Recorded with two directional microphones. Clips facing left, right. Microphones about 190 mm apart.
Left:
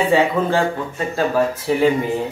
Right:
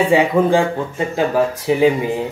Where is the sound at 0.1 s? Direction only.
15° right (ahead or behind).